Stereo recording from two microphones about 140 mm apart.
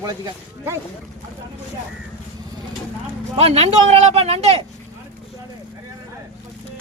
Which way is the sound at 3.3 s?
45° right (ahead or behind).